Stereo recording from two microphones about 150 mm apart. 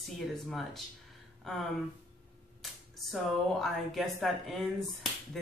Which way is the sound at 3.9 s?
Centre (ahead or behind).